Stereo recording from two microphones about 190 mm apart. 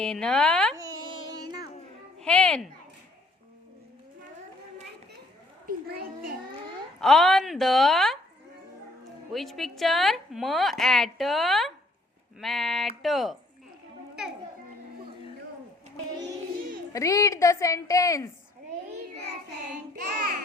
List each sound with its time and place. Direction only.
0.0 s a woman's voice: 5° left (ahead or behind)
2.2 s a woman's voice: 5° left (ahead or behind)
5.6 s a child's voice: 50° right (ahead or behind)
7.0 s a woman's voice: centre (ahead or behind)
9.3 s a woman's voice: centre (ahead or behind)
16.9 s a woman's voice: 15° left (ahead or behind)
20.0 s child singing: 45° right (ahead or behind)